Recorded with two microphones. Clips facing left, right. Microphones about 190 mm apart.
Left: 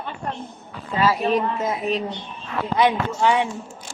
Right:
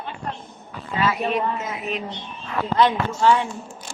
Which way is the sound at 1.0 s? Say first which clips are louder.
Left 3 dB; 35° left (ahead or behind).